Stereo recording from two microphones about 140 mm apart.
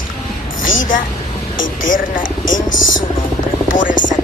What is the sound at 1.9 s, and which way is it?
Speech, 70° left (ahead or behind).